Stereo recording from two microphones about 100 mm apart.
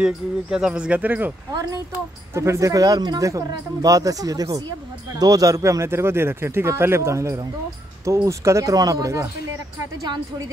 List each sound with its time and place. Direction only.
0.0 s speech: 5° right (ahead or behind)
1.5 s speech: 40° right (ahead or behind)